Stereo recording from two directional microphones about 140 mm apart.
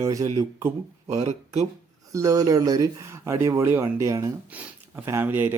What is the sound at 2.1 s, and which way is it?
Speech, 25° right (ahead or behind).